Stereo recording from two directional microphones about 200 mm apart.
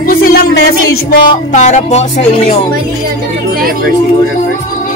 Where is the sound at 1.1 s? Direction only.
40° left (ahead or behind).